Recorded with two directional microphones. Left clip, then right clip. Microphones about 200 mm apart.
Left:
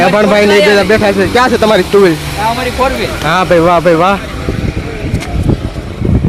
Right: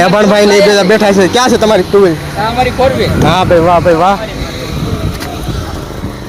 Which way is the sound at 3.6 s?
20° left (ahead or behind).